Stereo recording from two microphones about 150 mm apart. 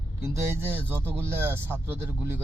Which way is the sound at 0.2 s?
15° right (ahead or behind).